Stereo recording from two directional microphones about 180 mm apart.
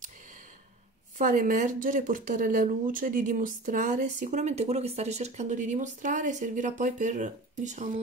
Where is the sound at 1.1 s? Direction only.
45° right (ahead or behind).